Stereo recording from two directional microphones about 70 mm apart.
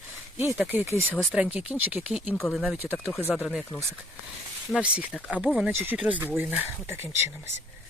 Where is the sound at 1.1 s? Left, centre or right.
Centre.